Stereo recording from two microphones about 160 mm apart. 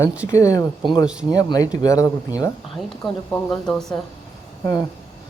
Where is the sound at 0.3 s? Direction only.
20° left (ahead or behind).